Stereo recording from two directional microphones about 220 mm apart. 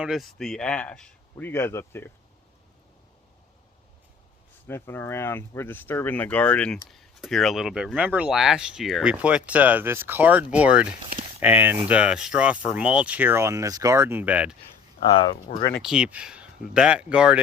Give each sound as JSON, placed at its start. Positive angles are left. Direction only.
{"t": 0.0, "sound": "speech", "side_deg": 0}
{"t": 4.6, "sound": "speech", "side_deg": 10}
{"t": 15.4, "sound": "speech", "side_deg": 20}
{"t": 15.7, "sound": "speech", "side_deg": -5}